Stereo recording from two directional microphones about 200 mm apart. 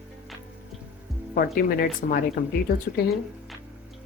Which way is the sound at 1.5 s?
45° left (ahead or behind).